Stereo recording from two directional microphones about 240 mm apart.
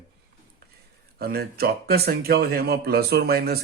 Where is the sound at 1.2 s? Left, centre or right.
Right.